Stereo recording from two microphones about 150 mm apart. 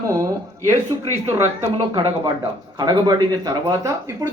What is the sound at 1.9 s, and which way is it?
A man's voice, 30° right (ahead or behind).